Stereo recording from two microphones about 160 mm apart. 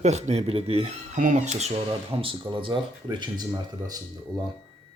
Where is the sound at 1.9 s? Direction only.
35° right (ahead or behind).